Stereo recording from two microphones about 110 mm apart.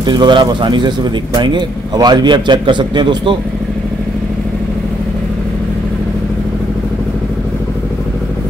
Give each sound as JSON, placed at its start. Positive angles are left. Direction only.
{"t": 0.0, "sound": "speech", "side_deg": -45}